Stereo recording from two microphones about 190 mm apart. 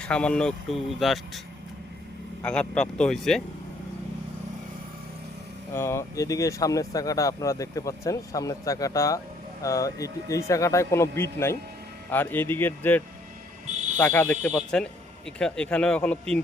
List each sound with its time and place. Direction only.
0.0 s speech: 5° left (ahead or behind)
2.4 s speech: 5° left (ahead or behind)
5.7 s speech: 15° left (ahead or behind)
14.0 s speech: 10° left (ahead or behind)